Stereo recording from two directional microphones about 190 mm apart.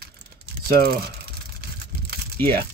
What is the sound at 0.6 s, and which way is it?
Speech, 55° right (ahead or behind).